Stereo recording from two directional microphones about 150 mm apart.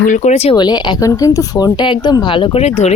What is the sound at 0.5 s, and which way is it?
A woman's voice, 30° left (ahead or behind).